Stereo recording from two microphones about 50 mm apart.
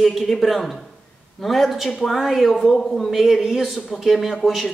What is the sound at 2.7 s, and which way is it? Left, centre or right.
Speech, centre.